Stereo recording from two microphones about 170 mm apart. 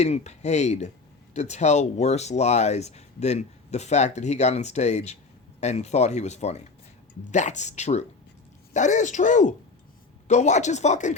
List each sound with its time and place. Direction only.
0.0 s speech: 40° left (ahead or behind)